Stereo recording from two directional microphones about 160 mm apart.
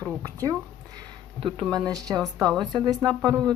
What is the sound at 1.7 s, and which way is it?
Speech, 25° right (ahead or behind).